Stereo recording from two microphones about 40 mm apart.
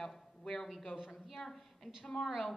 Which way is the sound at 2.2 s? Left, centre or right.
Centre.